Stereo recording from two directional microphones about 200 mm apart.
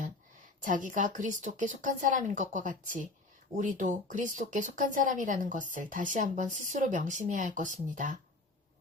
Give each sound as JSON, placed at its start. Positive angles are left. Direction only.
{"t": 0.6, "sound": "speech", "side_deg": -40}